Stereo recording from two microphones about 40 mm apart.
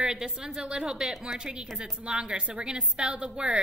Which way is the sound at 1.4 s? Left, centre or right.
Right.